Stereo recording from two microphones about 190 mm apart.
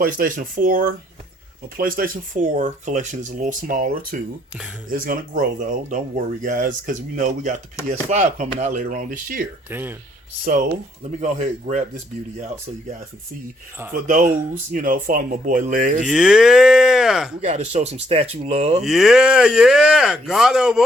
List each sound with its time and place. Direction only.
0.0 s speech: 45° right (ahead or behind)
9.6 s speech: 10° right (ahead or behind)
11.2 s speech: 35° right (ahead or behind)
14.7 s speech: 45° right (ahead or behind)
16.0 s speech: 5° right (ahead or behind)
17.4 s speech: 35° right (ahead or behind)
18.8 s speech: centre (ahead or behind)